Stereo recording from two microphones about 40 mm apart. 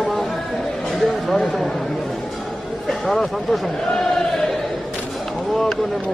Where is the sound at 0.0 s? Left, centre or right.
Centre.